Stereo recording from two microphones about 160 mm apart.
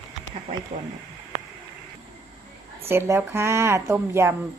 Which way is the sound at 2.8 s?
15° right (ahead or behind).